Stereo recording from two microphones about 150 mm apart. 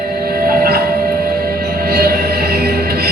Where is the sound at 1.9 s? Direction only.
90° right.